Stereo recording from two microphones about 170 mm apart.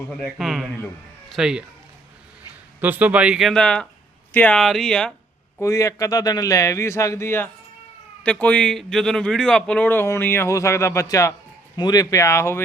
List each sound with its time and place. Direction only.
0.1 s speech: centre (ahead or behind)
2.8 s speech: 10° right (ahead or behind)
5.5 s a man's voice: 15° left (ahead or behind)